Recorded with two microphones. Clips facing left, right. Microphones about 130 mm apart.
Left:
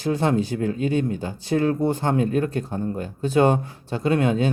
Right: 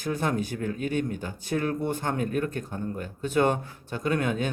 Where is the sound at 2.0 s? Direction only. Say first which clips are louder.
Left 6 dB; 25° left (ahead or behind).